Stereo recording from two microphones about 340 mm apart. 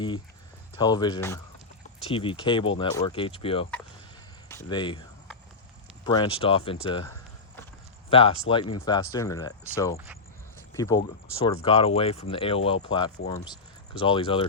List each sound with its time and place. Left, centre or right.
0.8 s speech: centre
6.1 s speech: centre
8.1 s speech: centre